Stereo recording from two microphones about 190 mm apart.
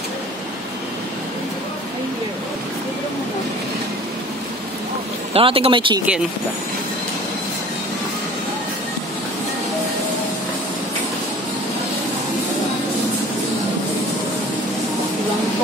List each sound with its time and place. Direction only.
5.3 s speech: 30° right (ahead or behind)